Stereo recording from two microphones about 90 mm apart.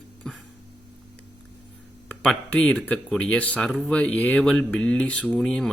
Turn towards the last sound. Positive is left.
turn(degrees=10)  # may be behind; listen again after turning